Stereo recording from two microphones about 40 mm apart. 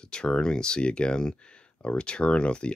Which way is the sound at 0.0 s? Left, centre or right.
Left.